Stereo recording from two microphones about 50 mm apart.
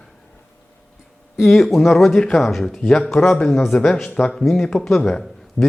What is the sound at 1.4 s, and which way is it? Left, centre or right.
Speech, centre.